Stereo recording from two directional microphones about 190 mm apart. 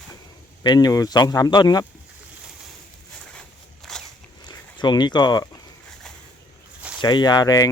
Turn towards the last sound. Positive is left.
turn(degrees=20)  # may be behind; listen again after turning